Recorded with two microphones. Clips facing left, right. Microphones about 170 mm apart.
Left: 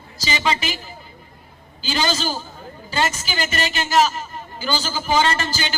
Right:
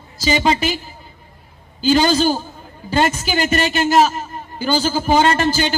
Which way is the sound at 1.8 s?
50° right (ahead or behind).